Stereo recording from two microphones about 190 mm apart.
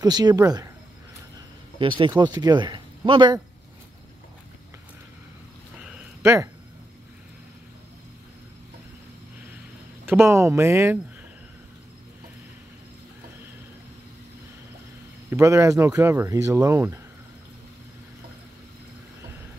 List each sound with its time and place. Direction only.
0.0 s speech: 20° right (ahead or behind)
1.8 s speech: 25° right (ahead or behind)
5.9 s a sound: 15° right (ahead or behind)
10.0 s speech: 15° right (ahead or behind)
15.2 s speech: 15° right (ahead or behind)